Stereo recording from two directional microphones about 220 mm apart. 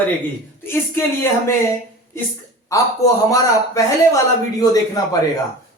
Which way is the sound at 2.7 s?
15° left (ahead or behind).